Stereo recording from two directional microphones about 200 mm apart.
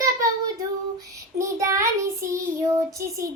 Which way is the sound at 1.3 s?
15° right (ahead or behind).